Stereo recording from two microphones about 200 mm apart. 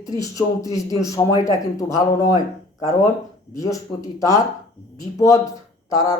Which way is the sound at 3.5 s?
15° left (ahead or behind).